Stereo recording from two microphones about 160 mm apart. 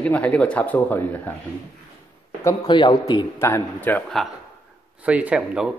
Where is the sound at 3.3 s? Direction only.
15° left (ahead or behind).